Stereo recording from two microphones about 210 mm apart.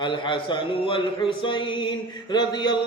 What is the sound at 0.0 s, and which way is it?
Speech, 25° left (ahead or behind).